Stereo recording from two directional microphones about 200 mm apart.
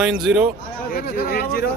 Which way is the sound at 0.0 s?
Centre (ahead or behind).